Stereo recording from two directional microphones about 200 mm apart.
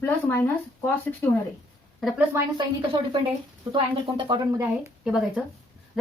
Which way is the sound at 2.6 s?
25° right (ahead or behind).